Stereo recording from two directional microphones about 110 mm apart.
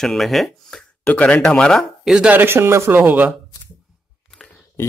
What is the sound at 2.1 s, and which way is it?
Speech, 15° right (ahead or behind).